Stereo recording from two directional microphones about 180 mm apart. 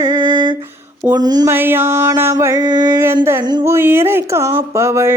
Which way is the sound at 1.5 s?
10° right (ahead or behind).